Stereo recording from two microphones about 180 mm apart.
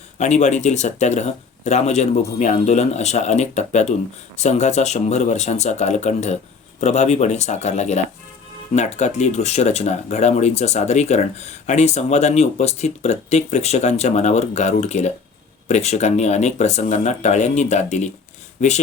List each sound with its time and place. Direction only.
0.2 s speech: 40° left (ahead or behind)